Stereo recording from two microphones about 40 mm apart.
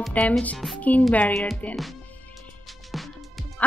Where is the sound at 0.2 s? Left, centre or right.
Left.